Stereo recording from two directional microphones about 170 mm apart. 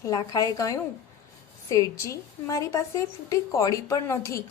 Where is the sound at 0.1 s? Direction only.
20° left (ahead or behind).